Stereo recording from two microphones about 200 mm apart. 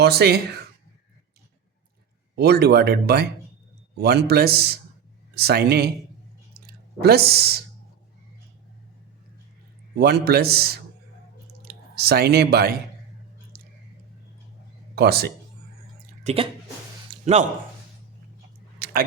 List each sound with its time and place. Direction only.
0.0 s speech: 55° right (ahead or behind)
2.3 s speech: 55° right (ahead or behind)
6.5 s a sound: 50° right (ahead or behind)
9.9 s speech: 55° right (ahead or behind)
13.5 s a sound: 50° right (ahead or behind)
14.9 s speech: 55° right (ahead or behind)
16.2 s speech: 30° right (ahead or behind)
17.1 s a sound: 30° right (ahead or behind)
18.8 s chewing: 50° right (ahead or behind)